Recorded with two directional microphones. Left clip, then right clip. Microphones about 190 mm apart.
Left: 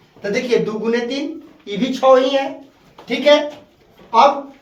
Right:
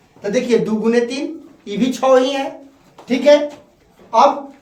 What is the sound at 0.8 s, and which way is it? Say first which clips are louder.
Speech: right 3 dB; 40° right (ahead or behind).